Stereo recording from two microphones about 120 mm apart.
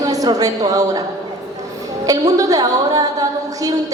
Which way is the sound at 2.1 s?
30° right (ahead or behind).